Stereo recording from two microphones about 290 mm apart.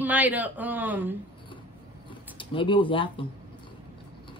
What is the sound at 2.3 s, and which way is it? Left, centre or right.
Speech, centre.